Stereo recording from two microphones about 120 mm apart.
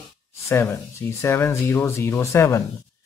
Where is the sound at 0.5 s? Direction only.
20° left (ahead or behind).